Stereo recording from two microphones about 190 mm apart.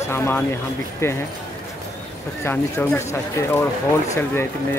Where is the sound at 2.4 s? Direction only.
15° left (ahead or behind).